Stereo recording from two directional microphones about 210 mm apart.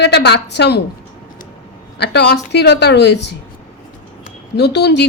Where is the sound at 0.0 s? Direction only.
55° left (ahead or behind).